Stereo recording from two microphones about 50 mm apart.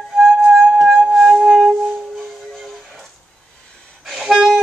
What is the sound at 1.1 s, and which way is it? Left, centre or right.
Music, centre.